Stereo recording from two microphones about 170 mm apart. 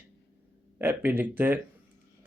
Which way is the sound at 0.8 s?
10° right (ahead or behind).